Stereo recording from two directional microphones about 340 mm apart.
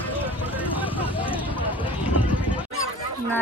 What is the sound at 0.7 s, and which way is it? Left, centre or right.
Vehicle, centre.